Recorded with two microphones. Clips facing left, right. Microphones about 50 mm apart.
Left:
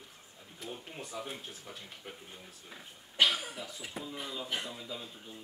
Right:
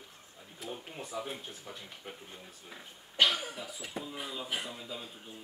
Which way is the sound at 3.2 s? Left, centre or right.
Centre.